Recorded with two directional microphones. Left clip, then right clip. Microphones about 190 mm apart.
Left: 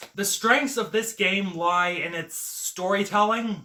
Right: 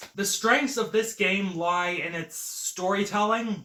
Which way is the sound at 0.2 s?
15° left (ahead or behind).